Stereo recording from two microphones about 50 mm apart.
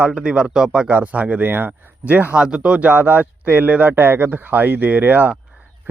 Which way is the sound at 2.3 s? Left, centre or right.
Centre.